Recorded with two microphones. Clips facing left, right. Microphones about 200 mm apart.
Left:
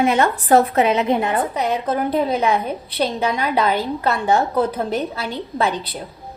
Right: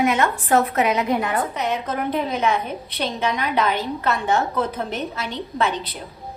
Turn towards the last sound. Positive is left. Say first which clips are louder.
# left 2 dB
turn(degrees=35)  # may be behind; listen again after turning